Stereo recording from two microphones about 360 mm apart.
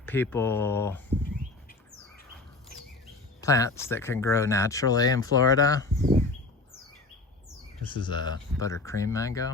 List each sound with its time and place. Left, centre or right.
0.0 s speech: centre
3.4 s speech: centre
6.0 s speech: right
7.9 s speech: centre